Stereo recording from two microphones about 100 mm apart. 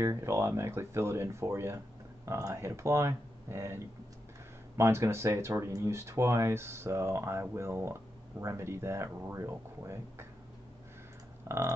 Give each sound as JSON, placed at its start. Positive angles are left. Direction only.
{"t": 0.0, "sound": "speech", "side_deg": -30}
{"t": 11.4, "sound": "typing", "side_deg": -25}